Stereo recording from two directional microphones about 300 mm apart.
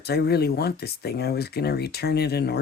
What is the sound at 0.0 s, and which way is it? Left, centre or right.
Speech, left.